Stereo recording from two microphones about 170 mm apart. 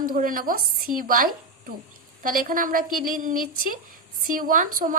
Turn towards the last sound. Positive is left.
turn(degrees=-50)  # may be behind; listen again after turning